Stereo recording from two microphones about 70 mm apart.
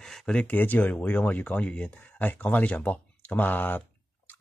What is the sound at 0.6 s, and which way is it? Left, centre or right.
Speech, left.